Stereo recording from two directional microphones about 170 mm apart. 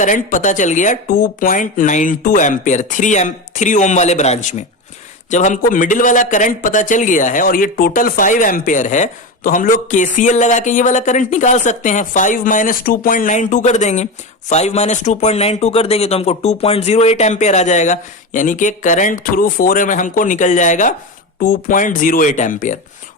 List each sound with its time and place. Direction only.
0.0 s speech: 50° left (ahead or behind)